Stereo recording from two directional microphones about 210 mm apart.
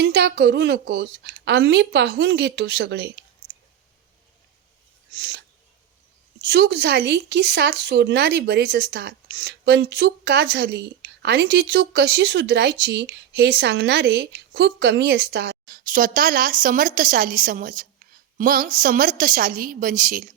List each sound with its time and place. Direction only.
0.0 s speech: 55° right (ahead or behind)
6.4 s a woman's voice: 50° right (ahead or behind)